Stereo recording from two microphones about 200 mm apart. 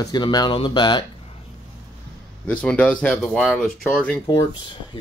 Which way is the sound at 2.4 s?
5° left (ahead or behind).